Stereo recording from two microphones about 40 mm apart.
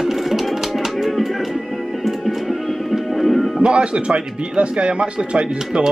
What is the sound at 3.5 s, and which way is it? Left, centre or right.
Speech, right.